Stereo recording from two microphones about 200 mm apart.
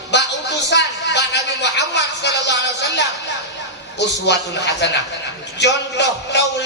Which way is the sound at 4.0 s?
60° left (ahead or behind).